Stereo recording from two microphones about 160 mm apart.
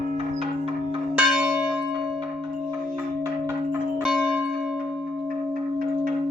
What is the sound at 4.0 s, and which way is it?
Church bell, 5° right (ahead or behind).